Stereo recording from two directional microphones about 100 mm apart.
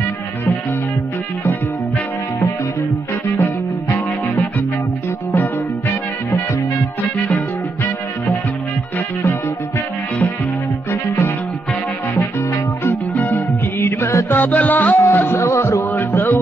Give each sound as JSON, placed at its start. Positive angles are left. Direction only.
{"t": 3.3, "sound": "music", "side_deg": 20}
{"t": 7.3, "sound": "music", "side_deg": 25}
{"t": 10.9, "sound": "music", "side_deg": 30}